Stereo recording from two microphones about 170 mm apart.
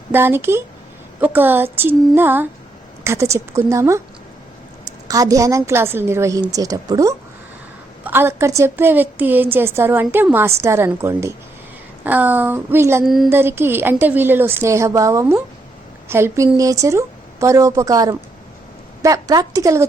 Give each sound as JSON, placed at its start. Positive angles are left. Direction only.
{"t": 0.1, "sound": "a woman's voice", "side_deg": -10}
{"t": 13.1, "sound": "speech", "side_deg": 0}
{"t": 13.3, "sound": "a woman's voice", "side_deg": -15}